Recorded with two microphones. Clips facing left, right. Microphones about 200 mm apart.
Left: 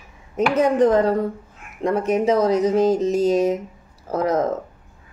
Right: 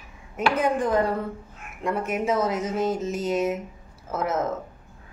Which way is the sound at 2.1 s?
35° left (ahead or behind).